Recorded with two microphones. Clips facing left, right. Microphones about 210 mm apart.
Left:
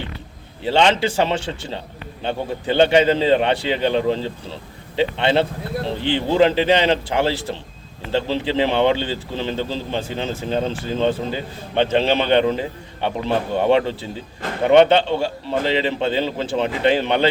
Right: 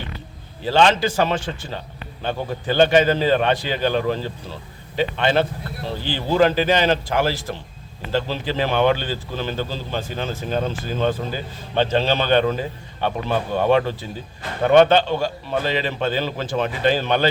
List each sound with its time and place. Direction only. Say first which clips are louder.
0.6 s a man's voice: even; 25° left (ahead or behind)